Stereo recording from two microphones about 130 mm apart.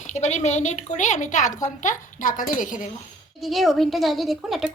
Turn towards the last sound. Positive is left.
turn(degrees=0)  # may be behind; listen again after turning